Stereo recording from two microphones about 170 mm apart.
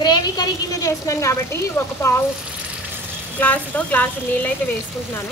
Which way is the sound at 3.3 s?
10° left (ahead or behind).